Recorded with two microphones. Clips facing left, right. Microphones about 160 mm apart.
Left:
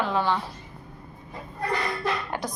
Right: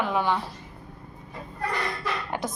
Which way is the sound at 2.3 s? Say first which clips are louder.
Right 1 dB; 20° right (ahead or behind).